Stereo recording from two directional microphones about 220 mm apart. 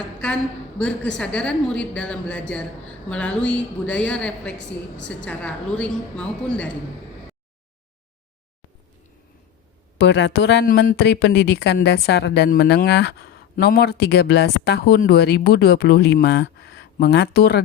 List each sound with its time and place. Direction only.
0.0 s a woman's voice: 5° left (ahead or behind)
10.0 s speech: 50° left (ahead or behind)